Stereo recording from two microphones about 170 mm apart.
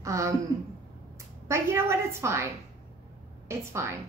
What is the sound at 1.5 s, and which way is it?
Speech, 15° right (ahead or behind).